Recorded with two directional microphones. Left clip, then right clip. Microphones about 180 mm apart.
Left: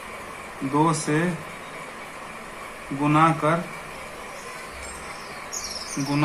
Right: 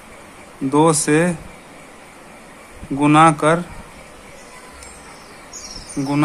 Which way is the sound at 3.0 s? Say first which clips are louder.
Right 7 dB; 65° right (ahead or behind).